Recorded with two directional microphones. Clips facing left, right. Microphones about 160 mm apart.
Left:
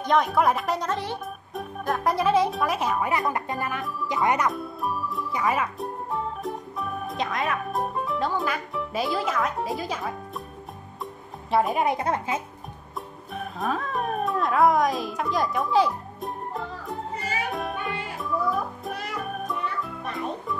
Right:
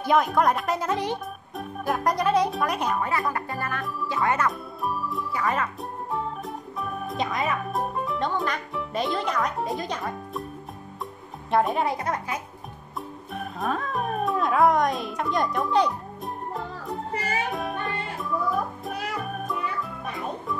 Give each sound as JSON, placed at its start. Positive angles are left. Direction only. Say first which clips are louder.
{"t": 0.0, "sound": "speech", "louder": "even", "side_deg": -5}
{"t": 1.5, "sound": "speech", "louder": "even", "side_deg": 0}
{"t": 3.1, "sound": "speech", "louder": "left 1 dB", "side_deg": 20}
{"t": 4.5, "sound": "speech", "louder": "left 1 dB", "side_deg": 0}
{"t": 11.5, "sound": "speech", "louder": "even", "side_deg": 5}
{"t": 11.8, "sound": "speech", "louder": "left 2 dB", "side_deg": 25}
{"t": 13.3, "sound": "music", "louder": "even", "side_deg": 0}